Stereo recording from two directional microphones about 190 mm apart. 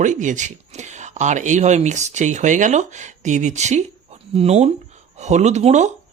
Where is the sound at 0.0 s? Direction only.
40° right (ahead or behind).